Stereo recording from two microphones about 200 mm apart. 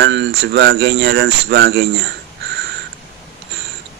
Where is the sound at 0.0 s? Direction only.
60° right (ahead or behind).